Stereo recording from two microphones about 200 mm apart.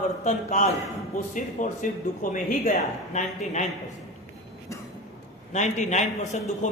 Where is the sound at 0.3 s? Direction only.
35° left (ahead or behind).